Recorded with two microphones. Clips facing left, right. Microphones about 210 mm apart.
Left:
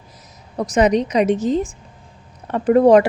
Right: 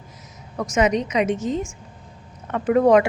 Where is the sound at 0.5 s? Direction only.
35° left (ahead or behind).